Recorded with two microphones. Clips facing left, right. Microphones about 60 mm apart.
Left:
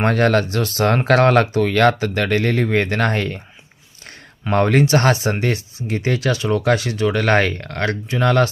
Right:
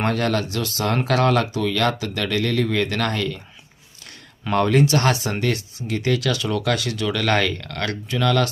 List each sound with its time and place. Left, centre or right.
0.0 s speech: left